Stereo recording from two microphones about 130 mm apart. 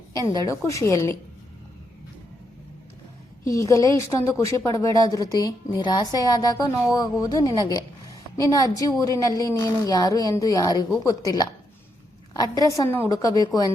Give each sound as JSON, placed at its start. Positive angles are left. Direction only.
{"t": 0.1, "sound": "a woman's voice", "side_deg": 25}
{"t": 3.4, "sound": "a woman's voice", "side_deg": 25}